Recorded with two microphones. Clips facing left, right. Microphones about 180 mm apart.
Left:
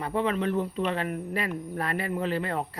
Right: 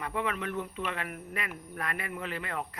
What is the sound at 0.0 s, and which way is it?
Speech, 30° left (ahead or behind).